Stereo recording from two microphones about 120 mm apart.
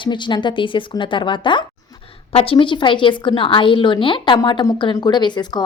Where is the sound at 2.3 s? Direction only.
50° left (ahead or behind).